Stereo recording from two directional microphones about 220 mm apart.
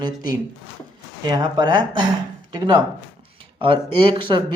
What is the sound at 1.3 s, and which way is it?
Speech, 20° right (ahead or behind).